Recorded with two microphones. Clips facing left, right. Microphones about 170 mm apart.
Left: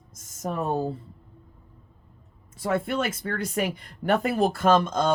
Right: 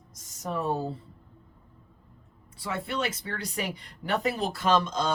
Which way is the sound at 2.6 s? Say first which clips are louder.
Left 6 dB; 50° left (ahead or behind).